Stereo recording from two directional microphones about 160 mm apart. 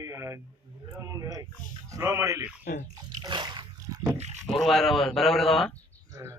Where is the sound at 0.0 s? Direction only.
20° right (ahead or behind).